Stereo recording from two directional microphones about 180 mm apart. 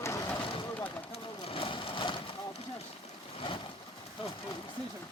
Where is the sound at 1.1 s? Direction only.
30° left (ahead or behind).